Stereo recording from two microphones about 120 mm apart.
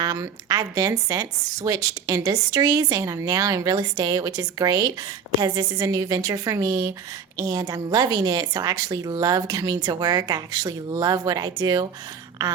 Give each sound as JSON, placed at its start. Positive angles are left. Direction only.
{"t": 0.0, "sound": "a woman's voice", "side_deg": -30}